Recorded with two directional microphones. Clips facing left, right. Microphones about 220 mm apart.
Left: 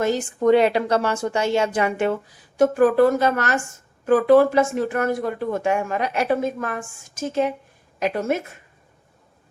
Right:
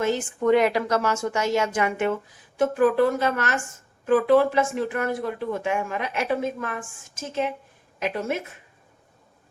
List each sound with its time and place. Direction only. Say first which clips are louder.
0.0 s a woman's voice: left 3 dB; 40° left (ahead or behind)